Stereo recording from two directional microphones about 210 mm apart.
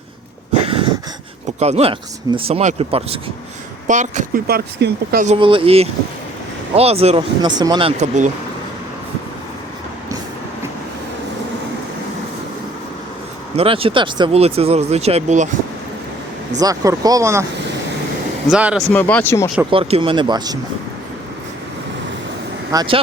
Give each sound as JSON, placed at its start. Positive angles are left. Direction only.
{"t": 0.6, "sound": "a sound", "side_deg": -25}
{"t": 1.5, "sound": "speech", "side_deg": -30}
{"t": 5.3, "sound": "speech", "side_deg": -25}
{"t": 13.6, "sound": "speech", "side_deg": -25}
{"t": 16.6, "sound": "speech", "side_deg": -15}
{"t": 18.5, "sound": "speech", "side_deg": -5}
{"t": 18.9, "sound": "speech", "side_deg": 10}
{"t": 19.7, "sound": "speech", "side_deg": -25}
{"t": 22.7, "sound": "speech", "side_deg": -20}